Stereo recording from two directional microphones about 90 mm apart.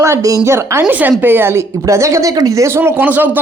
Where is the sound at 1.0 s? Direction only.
20° right (ahead or behind).